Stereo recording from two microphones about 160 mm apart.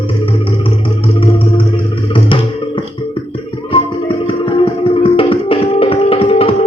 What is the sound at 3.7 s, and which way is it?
Music, 35° left (ahead or behind).